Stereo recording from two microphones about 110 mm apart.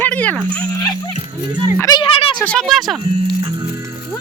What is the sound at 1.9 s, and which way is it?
Speech, 55° left (ahead or behind).